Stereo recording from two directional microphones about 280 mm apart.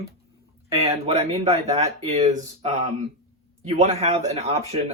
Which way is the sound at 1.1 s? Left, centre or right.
Right.